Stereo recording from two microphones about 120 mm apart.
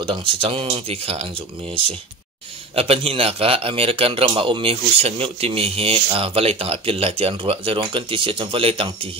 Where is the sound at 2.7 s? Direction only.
55° right (ahead or behind).